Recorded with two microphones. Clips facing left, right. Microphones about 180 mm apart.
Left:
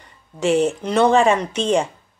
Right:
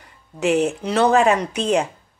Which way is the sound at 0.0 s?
5° right (ahead or behind).